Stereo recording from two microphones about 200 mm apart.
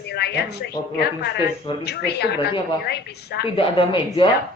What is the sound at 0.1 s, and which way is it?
Speech, 55° left (ahead or behind).